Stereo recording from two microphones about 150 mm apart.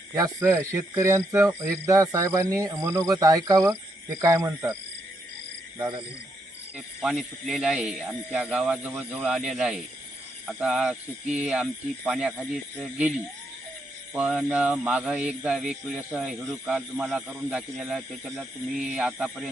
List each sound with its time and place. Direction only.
0.1 s speech: 20° right (ahead or behind)
6.7 s speech: 5° right (ahead or behind)